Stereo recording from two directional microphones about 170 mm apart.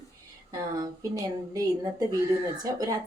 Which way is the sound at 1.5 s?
20° right (ahead or behind).